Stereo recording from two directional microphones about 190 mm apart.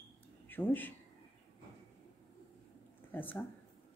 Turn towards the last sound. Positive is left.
turn(degrees=10)  # may be behind; listen again after turning